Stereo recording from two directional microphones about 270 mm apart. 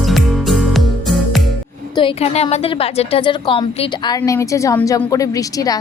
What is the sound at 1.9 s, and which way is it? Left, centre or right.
A woman's voice, left.